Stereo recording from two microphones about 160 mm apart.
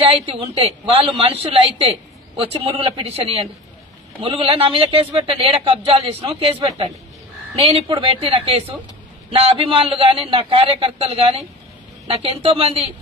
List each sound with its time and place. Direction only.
0.0 s a woman's voice: 35° right (ahead or behind)